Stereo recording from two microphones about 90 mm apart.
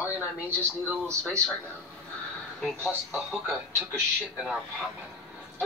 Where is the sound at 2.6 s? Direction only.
Centre (ahead or behind).